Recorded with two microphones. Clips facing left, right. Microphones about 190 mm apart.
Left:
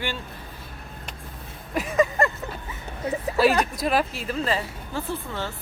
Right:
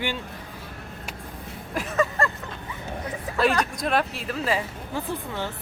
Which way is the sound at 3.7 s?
5° left (ahead or behind).